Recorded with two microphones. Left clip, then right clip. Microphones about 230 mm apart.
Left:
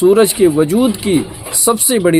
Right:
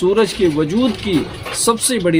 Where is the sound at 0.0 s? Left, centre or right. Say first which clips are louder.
Left 5 dB; left.